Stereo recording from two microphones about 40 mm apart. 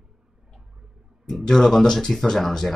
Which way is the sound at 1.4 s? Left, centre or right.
Centre.